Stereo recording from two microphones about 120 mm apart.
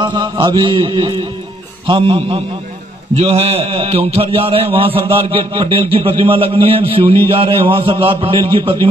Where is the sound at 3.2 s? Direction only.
60° right (ahead or behind).